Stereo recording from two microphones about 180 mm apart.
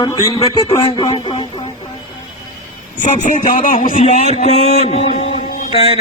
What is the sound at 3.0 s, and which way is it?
Speech, 45° left (ahead or behind).